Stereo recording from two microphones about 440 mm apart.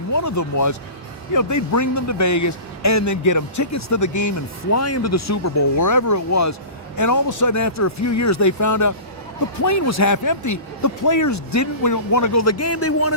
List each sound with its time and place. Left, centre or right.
0.1 s a man's voice: left